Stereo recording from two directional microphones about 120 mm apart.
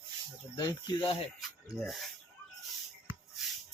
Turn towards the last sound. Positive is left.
turn(degrees=-5)  # may be behind; listen again after turning